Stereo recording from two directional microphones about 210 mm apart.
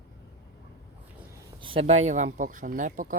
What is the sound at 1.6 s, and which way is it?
Speech, 25° right (ahead or behind).